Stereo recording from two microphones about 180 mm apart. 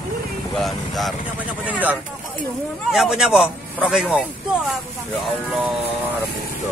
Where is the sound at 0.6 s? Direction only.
Centre (ahead or behind).